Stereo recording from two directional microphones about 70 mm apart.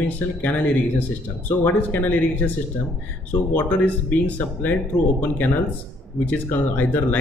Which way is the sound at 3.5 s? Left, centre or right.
Left.